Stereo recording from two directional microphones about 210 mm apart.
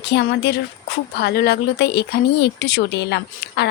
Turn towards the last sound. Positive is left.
turn(degrees=55)  # may be behind; listen again after turning